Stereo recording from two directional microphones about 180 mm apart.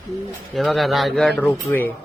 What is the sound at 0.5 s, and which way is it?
Speech, centre (ahead or behind).